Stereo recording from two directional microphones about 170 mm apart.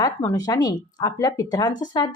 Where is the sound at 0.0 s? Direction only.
20° left (ahead or behind).